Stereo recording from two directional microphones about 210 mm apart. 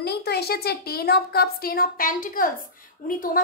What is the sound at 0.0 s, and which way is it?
A woman's voice, 50° left (ahead or behind).